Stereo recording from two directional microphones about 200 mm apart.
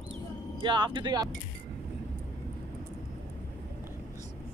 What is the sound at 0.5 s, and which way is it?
Speech, 25° right (ahead or behind).